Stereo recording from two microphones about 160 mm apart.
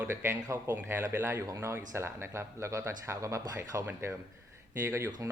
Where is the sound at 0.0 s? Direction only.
15° right (ahead or behind).